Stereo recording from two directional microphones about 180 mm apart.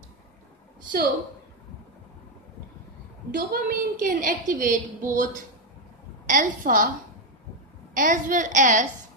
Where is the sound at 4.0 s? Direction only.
45° right (ahead or behind).